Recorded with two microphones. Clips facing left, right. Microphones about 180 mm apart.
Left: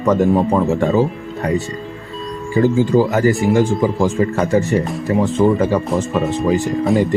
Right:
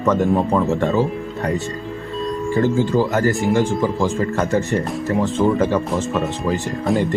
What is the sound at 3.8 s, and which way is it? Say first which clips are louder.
Speech: left 3 dB; 15° left (ahead or behind).